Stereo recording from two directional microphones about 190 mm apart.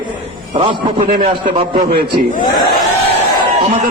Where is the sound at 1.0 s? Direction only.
40° right (ahead or behind).